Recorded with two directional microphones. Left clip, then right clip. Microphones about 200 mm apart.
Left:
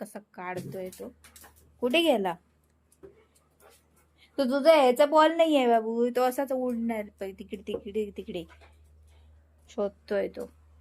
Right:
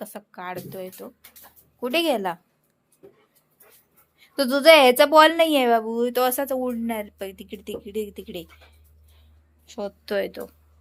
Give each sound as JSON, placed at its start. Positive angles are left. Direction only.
{"t": 0.0, "sound": "a woman's voice", "side_deg": 0}
{"t": 1.8, "sound": "speech", "side_deg": 10}
{"t": 4.4, "sound": "a woman's voice", "side_deg": -10}
{"t": 5.3, "sound": "a woman's voice", "side_deg": -5}
{"t": 9.6, "sound": "a woman's voice", "side_deg": 15}
{"t": 10.1, "sound": "a woman's voice", "side_deg": 0}